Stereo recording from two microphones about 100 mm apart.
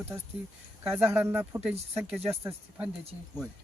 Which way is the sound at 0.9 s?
20° right (ahead or behind).